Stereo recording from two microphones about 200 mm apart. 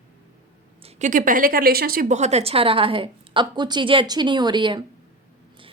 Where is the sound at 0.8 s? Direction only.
40° right (ahead or behind).